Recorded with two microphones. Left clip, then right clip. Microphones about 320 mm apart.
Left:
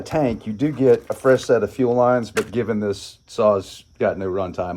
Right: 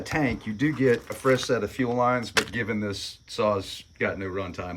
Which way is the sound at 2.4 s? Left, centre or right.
Centre.